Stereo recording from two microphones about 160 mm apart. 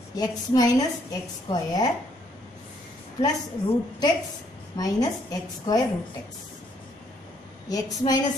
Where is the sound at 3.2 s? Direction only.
25° left (ahead or behind).